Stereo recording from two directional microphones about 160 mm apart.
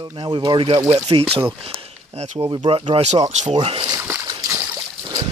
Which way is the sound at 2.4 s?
30° right (ahead or behind).